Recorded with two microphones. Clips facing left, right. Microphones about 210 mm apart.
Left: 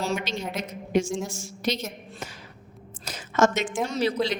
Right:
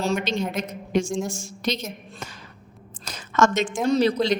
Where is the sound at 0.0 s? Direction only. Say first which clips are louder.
Right 4 dB; 5° left (ahead or behind).